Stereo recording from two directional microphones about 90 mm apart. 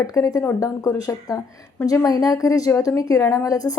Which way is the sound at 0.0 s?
40° left (ahead or behind).